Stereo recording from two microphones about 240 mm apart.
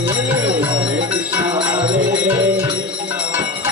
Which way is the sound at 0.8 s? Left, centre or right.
Right.